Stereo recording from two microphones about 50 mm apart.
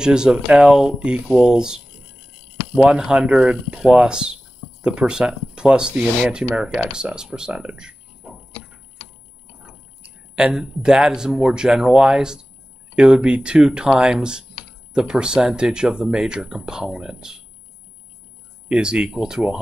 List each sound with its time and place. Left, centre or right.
0.0 s speech: centre
2.8 s speech: centre
10.3 s speech: centre
18.7 s speech: centre